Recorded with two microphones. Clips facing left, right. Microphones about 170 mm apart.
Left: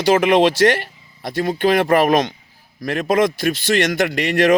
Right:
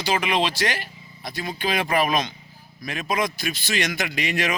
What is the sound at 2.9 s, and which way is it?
Speech, 55° left (ahead or behind).